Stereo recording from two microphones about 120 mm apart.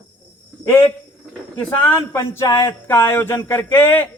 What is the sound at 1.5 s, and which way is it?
A man's voice, 15° left (ahead or behind).